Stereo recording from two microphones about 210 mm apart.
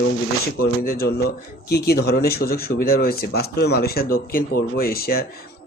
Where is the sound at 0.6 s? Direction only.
45° left (ahead or behind).